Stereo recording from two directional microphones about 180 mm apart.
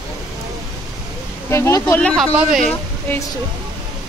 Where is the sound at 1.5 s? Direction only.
15° left (ahead or behind); by 2.7 s centre (ahead or behind).